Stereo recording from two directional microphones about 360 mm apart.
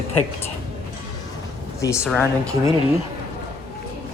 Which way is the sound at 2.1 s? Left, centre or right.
Centre.